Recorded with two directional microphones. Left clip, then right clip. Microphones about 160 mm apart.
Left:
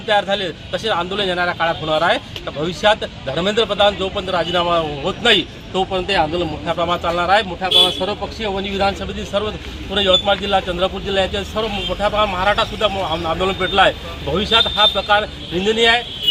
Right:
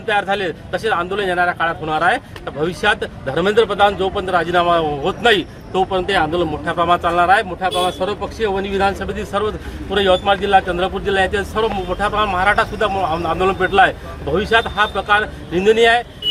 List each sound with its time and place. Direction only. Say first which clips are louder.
0.1 s speech: even; 30° right (ahead or behind)